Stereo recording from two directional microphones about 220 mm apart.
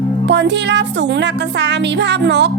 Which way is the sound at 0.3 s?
50° right (ahead or behind).